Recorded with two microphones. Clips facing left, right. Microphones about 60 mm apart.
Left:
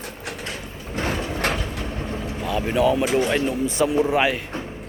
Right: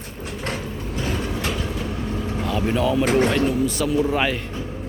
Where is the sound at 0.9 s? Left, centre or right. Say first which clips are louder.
Left 2 dB; left.